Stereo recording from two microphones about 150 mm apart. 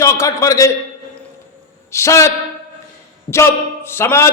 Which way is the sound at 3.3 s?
15° left (ahead or behind).